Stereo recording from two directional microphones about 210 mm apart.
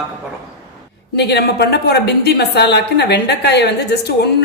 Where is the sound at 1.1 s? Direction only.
50° left (ahead or behind).